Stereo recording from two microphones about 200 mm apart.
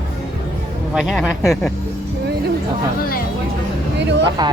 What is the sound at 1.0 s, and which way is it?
Speech, 5° right (ahead or behind).